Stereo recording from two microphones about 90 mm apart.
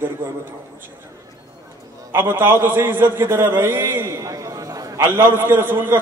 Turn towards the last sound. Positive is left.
turn(degrees=-25)  # may be behind; listen again after turning